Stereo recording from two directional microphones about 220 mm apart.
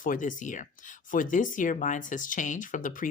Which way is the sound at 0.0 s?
35° left (ahead or behind).